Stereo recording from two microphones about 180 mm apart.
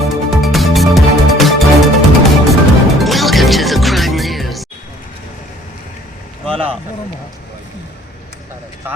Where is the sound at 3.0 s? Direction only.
Centre (ahead or behind).